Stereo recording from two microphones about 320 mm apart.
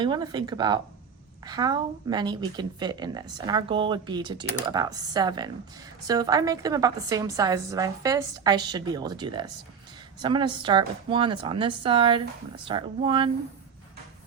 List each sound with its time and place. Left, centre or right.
0.0 s a woman's voice: centre